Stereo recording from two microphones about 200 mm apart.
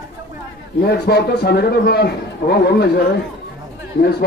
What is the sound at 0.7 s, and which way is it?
A man's voice, 55° left (ahead or behind).